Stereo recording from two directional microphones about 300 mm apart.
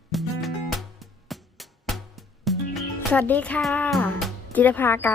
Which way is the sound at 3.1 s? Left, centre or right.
Centre.